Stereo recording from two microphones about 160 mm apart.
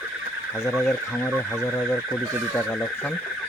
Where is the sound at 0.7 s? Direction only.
Centre (ahead or behind).